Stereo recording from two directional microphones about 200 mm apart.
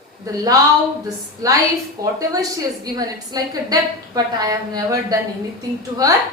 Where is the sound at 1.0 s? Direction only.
15° right (ahead or behind).